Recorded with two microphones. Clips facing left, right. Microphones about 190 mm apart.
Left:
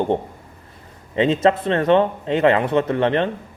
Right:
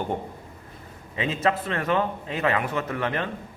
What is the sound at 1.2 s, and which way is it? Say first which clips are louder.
A man's voice: left 8 dB; 30° left (ahead or behind).